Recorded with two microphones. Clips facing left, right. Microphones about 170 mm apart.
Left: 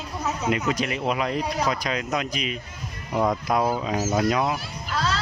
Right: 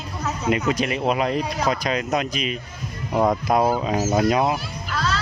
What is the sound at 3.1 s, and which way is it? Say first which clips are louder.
Speech: right 3 dB; 45° right (ahead or behind).